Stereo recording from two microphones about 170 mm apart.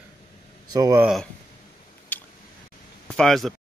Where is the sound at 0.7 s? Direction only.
20° right (ahead or behind).